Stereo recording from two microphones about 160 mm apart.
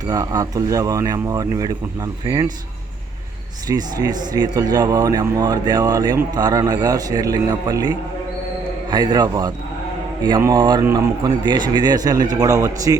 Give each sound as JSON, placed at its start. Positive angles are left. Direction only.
{"t": 0.0, "sound": "speech", "side_deg": -20}
{"t": 3.7, "sound": "speech", "side_deg": -25}